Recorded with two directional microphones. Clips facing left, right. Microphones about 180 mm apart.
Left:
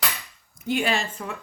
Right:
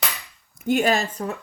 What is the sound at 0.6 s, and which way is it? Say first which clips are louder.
Speech: right 5 dB; 45° right (ahead or behind).